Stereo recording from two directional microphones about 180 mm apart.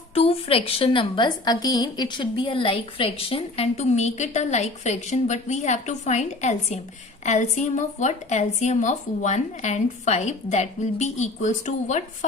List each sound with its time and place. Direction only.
0.1 s a woman's voice: 35° left (ahead or behind)